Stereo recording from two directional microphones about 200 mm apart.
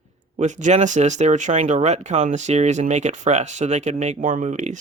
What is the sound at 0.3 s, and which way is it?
Speech, 35° right (ahead or behind).